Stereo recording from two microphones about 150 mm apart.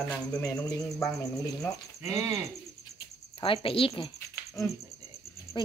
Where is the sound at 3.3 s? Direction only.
35° left (ahead or behind).